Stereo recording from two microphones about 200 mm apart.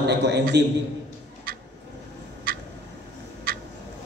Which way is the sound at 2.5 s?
45° right (ahead or behind).